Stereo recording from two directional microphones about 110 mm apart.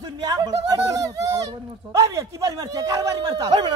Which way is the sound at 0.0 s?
35° right (ahead or behind).